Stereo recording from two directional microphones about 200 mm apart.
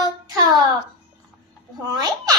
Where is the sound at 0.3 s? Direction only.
20° right (ahead or behind).